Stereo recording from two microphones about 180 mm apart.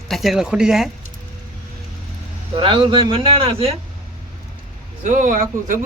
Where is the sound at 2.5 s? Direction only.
30° right (ahead or behind).